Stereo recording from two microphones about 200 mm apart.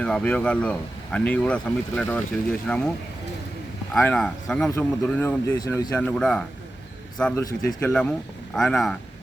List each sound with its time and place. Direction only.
0.0 s speech: 5° left (ahead or behind)
3.9 s a man's voice: 5° left (ahead or behind)
5.5 s a man's voice: 20° left (ahead or behind)
6.0 s speech: 5° left (ahead or behind)